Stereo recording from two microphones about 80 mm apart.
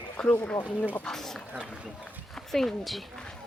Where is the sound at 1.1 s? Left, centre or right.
Centre.